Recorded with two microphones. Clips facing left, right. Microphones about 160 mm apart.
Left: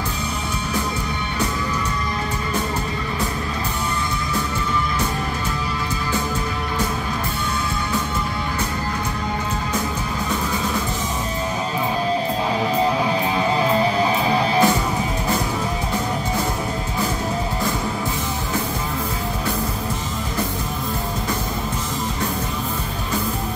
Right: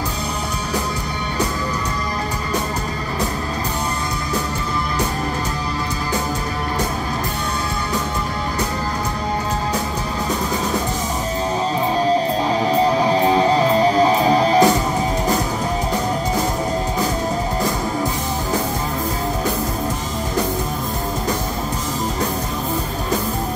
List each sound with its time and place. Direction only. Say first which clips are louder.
13.0 s music: right 5 dB; 35° right (ahead or behind)